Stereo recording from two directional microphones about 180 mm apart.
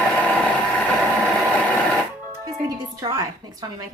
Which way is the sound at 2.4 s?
20° right (ahead or behind).